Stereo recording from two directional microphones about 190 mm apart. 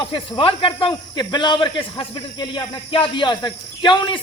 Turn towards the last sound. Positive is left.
turn(degrees=25)  # may be behind; listen again after turning